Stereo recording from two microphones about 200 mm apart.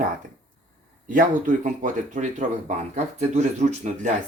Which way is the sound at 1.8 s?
40° right (ahead or behind).